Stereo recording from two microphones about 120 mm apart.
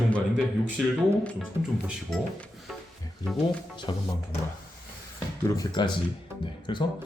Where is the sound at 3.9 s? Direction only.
40° left (ahead or behind).